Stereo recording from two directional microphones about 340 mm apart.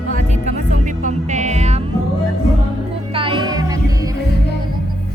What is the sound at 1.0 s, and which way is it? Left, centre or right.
Music, right.